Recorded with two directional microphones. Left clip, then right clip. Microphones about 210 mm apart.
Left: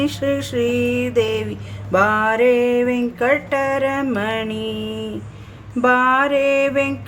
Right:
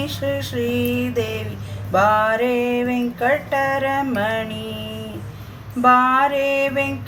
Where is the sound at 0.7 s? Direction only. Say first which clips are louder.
Left 3 dB; 45° left (ahead or behind).